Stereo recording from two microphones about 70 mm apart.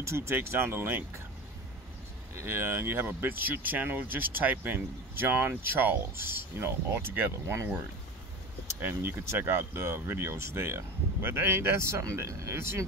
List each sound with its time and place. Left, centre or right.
0.0 s speech: right
2.3 s speech: right
8.8 s speech: right